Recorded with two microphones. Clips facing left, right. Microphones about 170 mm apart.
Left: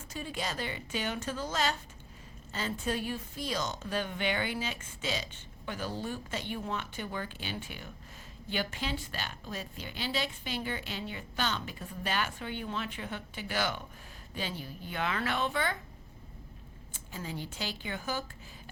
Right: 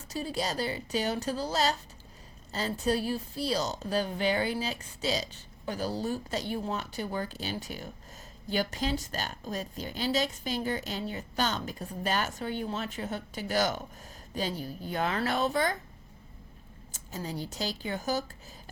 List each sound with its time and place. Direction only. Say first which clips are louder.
0.1 s a woman's voice: right 5 dB; 35° right (ahead or behind)
16.9 s a woman's voice: right 3 dB; 40° right (ahead or behind)